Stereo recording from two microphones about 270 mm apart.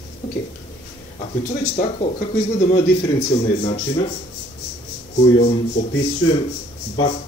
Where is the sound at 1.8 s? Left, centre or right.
Left.